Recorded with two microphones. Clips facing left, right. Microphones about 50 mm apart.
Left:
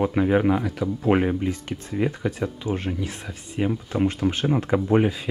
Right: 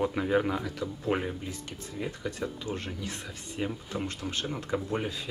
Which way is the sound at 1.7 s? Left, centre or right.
Left.